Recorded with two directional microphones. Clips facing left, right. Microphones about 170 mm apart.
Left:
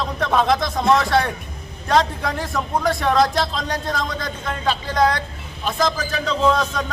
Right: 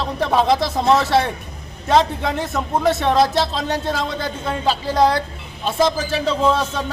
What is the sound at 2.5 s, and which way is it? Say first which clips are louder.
A man's voice: right 3 dB; 25° right (ahead or behind).